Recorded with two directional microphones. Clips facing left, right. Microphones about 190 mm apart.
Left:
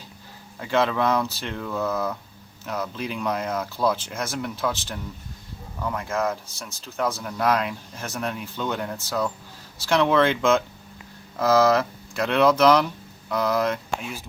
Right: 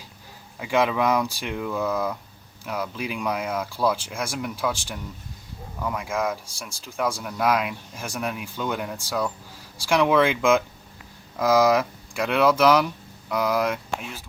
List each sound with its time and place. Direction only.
0.6 s speech: 10° right (ahead or behind)